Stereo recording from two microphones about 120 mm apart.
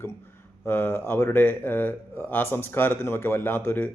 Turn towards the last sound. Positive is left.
turn(degrees=15)  # may be behind; listen again after turning